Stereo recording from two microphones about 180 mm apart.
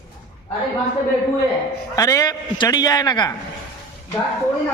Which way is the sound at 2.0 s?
20° left (ahead or behind).